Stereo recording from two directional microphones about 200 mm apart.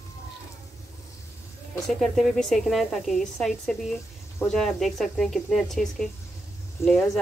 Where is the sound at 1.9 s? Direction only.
Centre (ahead or behind).